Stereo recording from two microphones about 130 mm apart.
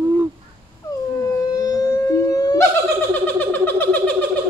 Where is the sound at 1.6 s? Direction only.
25° left (ahead or behind).